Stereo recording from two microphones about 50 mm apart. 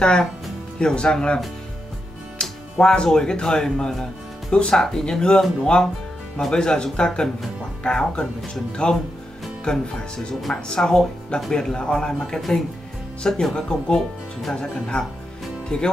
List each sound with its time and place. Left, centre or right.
0.0 s speech: centre
2.4 s music: centre
2.8 s speech: centre
12.4 s speech: centre; by 15.9 s left